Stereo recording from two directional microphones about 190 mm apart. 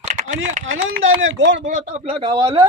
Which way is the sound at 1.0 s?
90° right.